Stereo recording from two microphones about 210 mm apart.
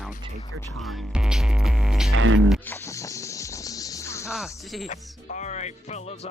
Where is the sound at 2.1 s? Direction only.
70° right (ahead or behind).